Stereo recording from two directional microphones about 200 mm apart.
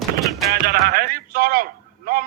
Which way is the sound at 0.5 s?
50° right (ahead or behind).